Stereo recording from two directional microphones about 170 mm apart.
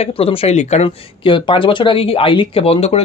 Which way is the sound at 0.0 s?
35° left (ahead or behind).